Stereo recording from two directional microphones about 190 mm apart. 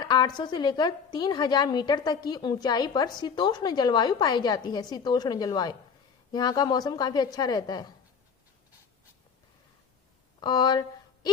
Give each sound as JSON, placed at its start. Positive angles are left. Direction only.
{"t": 0.0, "sound": "a woman's voice", "side_deg": 20}
{"t": 10.4, "sound": "speech", "side_deg": 20}